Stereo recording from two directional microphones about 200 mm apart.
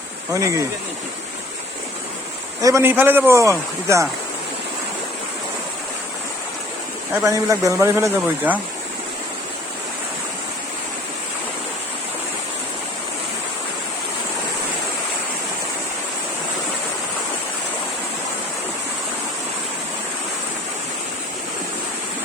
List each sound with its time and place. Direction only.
0.3 s speech: 15° right (ahead or behind)
2.6 s speech: 15° right (ahead or behind)
7.3 s speech: 15° right (ahead or behind)